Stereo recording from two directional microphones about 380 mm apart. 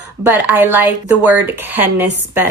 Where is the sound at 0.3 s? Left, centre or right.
Centre.